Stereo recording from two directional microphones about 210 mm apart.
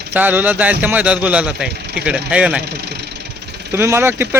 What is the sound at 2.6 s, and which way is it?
Vehicle, 50° right (ahead or behind).